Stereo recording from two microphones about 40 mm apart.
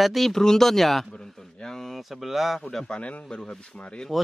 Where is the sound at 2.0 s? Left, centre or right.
Centre.